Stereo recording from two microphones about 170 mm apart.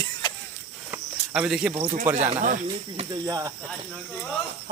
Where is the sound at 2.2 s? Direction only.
40° right (ahead or behind).